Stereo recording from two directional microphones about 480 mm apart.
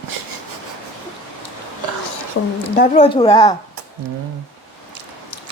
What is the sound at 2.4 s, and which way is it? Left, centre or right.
Speech, left.